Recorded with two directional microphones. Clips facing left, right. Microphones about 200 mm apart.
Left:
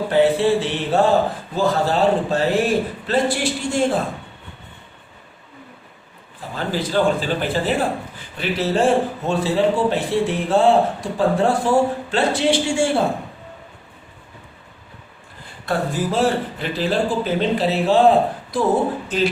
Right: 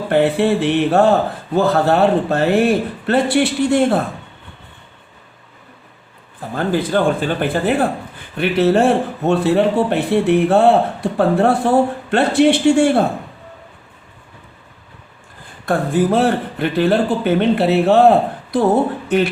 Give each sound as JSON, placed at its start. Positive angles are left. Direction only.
{"t": 0.1, "sound": "speech", "side_deg": -60}
{"t": 6.5, "sound": "speech", "side_deg": -55}
{"t": 15.6, "sound": "speech", "side_deg": -55}